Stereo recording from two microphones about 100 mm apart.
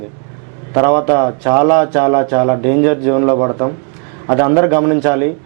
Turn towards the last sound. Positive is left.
turn(degrees=-15)  # may be behind; listen again after turning